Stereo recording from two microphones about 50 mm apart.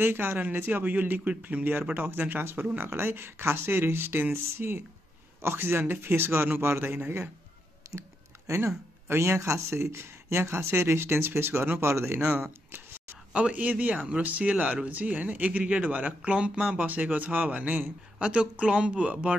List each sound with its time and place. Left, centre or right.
0.0 s speech: right
0.4 s speech: right
1.2 s speech: right
1.6 s speech: right
7.8 s a sound: right
8.5 s speech: right
9.0 s speech: right
11.9 s speech: right
13.3 s speech: right